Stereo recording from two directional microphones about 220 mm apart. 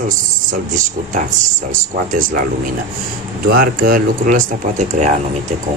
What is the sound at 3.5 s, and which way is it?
Speech, 45° right (ahead or behind).